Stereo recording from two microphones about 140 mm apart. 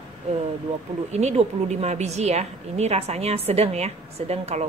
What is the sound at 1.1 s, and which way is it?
A woman's voice, 50° right (ahead or behind).